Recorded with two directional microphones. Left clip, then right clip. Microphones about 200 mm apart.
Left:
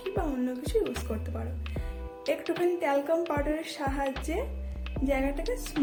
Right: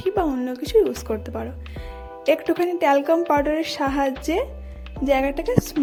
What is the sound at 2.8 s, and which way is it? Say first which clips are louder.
A woman's voice: right 9 dB; 50° right (ahead or behind).